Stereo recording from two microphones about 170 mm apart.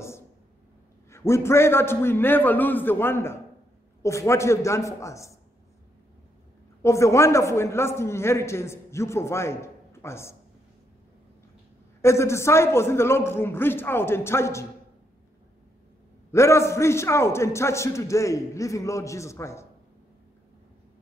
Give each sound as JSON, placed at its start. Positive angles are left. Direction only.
{"t": 1.1, "sound": "a man's voice", "side_deg": 15}
{"t": 6.8, "sound": "a man's voice", "side_deg": 15}
{"t": 12.0, "sound": "a man's voice", "side_deg": 15}
{"t": 16.3, "sound": "a man's voice", "side_deg": 15}